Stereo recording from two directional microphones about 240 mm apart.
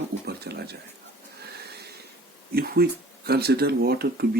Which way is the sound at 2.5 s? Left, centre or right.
Right.